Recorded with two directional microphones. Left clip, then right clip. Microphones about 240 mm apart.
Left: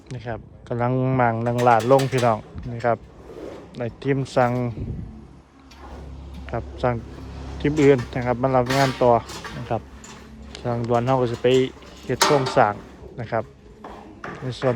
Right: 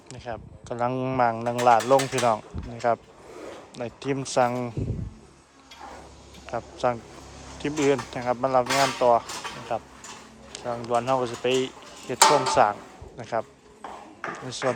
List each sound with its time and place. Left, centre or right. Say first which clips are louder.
0.1 s speech: left 3 dB; centre
6.4 s a man's voice: left 1 dB; centre
8.6 s speech: left 2 dB; right
9.0 s a man's voice: left 2 dB; centre